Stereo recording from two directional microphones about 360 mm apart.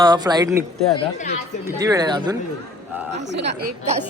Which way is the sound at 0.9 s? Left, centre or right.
Centre.